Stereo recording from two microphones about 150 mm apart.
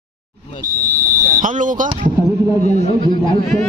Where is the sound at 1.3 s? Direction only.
60° right (ahead or behind).